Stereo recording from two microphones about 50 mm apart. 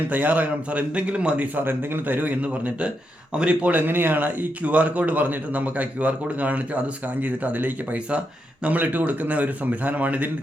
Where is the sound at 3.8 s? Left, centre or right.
Right.